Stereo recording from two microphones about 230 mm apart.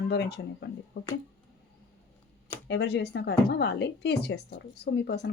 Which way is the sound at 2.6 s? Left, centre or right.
Left.